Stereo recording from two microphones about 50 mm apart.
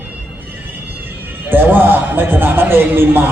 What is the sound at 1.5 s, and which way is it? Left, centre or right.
Speech, right.